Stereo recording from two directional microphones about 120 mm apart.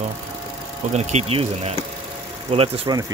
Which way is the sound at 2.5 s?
55° right (ahead or behind).